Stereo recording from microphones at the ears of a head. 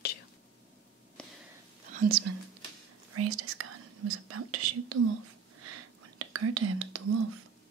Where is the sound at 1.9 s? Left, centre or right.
Right.